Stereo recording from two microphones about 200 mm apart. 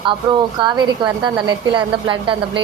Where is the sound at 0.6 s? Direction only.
20° right (ahead or behind).